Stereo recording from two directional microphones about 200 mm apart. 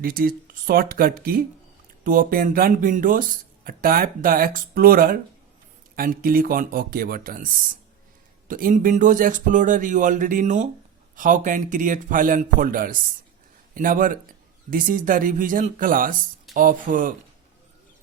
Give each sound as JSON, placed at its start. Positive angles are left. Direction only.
{"t": 0.0, "sound": "speech", "side_deg": -45}